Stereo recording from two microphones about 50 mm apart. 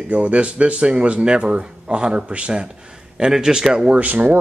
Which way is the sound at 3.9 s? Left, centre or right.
Right.